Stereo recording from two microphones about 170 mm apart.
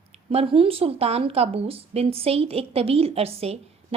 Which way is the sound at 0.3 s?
35° right (ahead or behind).